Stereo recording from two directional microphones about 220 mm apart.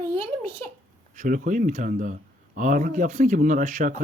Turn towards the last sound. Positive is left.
turn(degrees=-35)  # may be behind; listen again after turning